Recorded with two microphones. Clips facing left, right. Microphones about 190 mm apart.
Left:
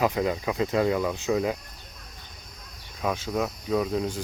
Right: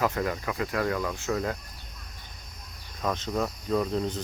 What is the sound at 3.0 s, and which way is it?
Speech, 10° left (ahead or behind).